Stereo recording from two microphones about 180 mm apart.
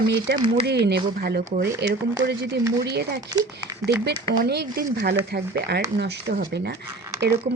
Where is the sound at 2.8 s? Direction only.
65° right (ahead or behind).